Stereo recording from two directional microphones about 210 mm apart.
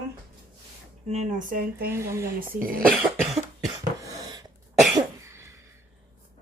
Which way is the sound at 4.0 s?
15° right (ahead or behind).